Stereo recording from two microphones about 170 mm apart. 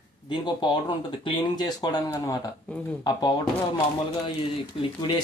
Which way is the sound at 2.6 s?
5° left (ahead or behind).